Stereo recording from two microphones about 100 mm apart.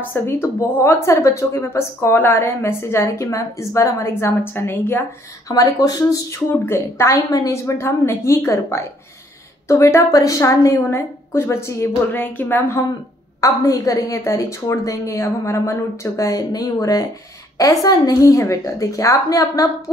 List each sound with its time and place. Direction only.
0.1 s speech: 25° left (ahead or behind)
5.5 s a woman's voice: 40° left (ahead or behind); by 12.8 s 25° left (ahead or behind)
13.4 s a woman's voice: 35° left (ahead or behind)